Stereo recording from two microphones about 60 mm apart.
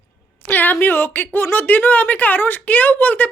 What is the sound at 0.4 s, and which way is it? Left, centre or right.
A woman's voice, left.